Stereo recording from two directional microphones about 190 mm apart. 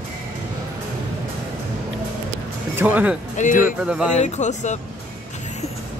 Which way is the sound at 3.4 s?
45° left (ahead or behind).